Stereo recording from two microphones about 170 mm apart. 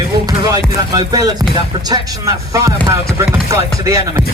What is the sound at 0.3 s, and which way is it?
Music, 25° right (ahead or behind).